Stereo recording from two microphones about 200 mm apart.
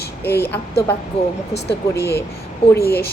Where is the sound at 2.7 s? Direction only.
10° left (ahead or behind).